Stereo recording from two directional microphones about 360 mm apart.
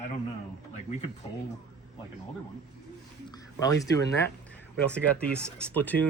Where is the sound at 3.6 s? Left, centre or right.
Centre.